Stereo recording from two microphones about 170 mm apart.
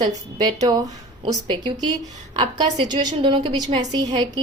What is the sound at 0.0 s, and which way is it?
Speech, 20° right (ahead or behind).